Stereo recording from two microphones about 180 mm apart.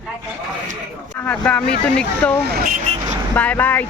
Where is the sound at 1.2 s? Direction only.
5° left (ahead or behind).